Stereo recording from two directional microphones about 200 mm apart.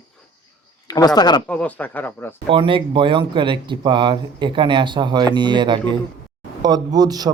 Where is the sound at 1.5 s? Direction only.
5° left (ahead or behind).